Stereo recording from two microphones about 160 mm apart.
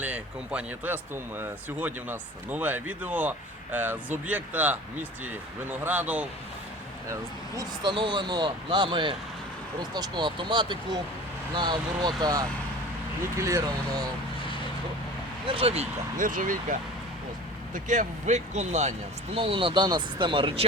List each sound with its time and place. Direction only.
0.0 s speech: 10° right (ahead or behind)
5.8 s speech: 10° right (ahead or behind)
7.1 s speech: 20° right (ahead or behind)
15.4 s speech: 35° right (ahead or behind); by 16.7 s 55° right (ahead or behind)
17.8 s speech: 50° right (ahead or behind); by 20.7 s 30° right (ahead or behind)